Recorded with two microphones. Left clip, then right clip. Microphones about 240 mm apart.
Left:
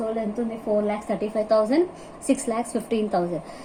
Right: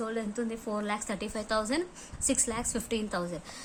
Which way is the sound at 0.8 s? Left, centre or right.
Right.